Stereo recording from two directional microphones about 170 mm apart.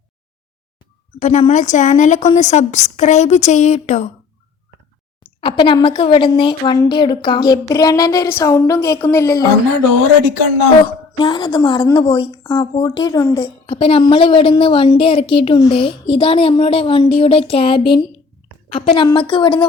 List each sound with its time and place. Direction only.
1.2 s a woman's voice: 40° left (ahead or behind)
5.4 s a woman's voice: 30° left (ahead or behind)
11.2 s a woman's voice: 25° left (ahead or behind)